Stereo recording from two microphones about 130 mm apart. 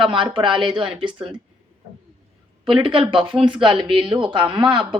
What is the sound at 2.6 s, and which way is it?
Speech, 40° right (ahead or behind).